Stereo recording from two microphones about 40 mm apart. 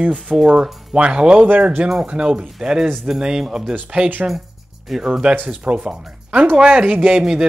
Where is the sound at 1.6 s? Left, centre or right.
Right.